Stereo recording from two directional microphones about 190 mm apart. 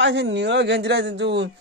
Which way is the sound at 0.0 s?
70° right (ahead or behind).